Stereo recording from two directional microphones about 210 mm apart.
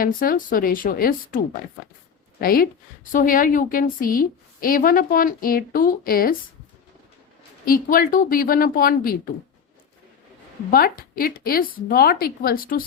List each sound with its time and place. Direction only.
0.0 s speech: 40° left (ahead or behind)
2.4 s a woman's voice: 45° left (ahead or behind)
7.6 s speech: 45° left (ahead or behind)
10.7 s speech: 45° left (ahead or behind)